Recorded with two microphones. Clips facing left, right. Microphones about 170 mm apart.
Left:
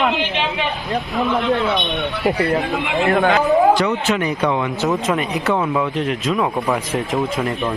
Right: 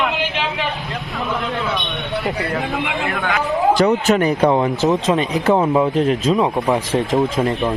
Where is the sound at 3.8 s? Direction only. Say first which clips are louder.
Right 4 dB; 45° right (ahead or behind).